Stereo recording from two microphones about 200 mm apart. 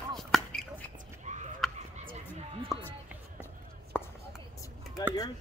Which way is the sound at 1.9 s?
45° right (ahead or behind).